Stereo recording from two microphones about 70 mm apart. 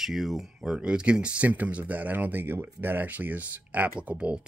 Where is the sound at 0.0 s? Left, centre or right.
Centre.